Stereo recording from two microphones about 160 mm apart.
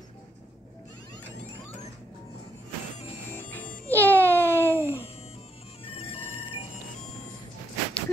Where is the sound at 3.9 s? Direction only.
10° left (ahead or behind).